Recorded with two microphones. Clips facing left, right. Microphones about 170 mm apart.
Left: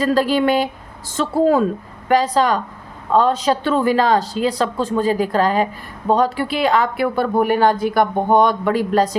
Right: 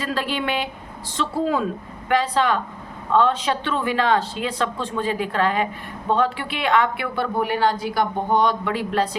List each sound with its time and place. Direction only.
0.0 s speech: 40° left (ahead or behind)